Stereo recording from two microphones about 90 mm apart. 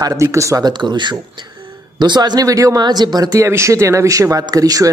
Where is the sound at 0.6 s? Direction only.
55° right (ahead or behind); by 2.8 s 40° right (ahead or behind).